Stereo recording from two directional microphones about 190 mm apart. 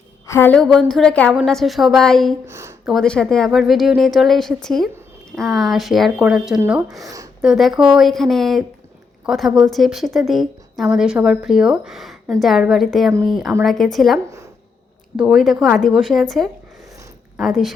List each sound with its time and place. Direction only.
0.3 s a woman's voice: 10° left (ahead or behind)
2.5 s speech: 15° right (ahead or behind)
2.8 s a woman's voice: centre (ahead or behind)
7.0 s speech: 20° right (ahead or behind)
7.4 s a woman's voice: centre (ahead or behind)